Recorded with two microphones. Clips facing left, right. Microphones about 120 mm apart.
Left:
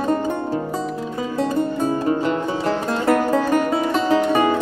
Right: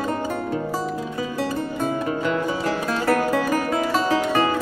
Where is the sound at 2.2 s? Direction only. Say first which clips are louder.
Left 2 dB; 35° left (ahead or behind).